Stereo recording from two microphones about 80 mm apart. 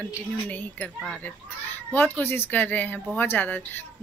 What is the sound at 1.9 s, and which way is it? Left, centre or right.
Speech, left.